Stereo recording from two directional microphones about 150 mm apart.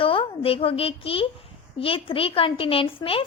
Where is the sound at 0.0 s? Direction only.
35° left (ahead or behind).